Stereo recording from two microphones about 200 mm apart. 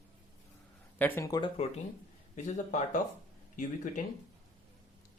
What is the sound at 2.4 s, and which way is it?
Speech, 40° left (ahead or behind).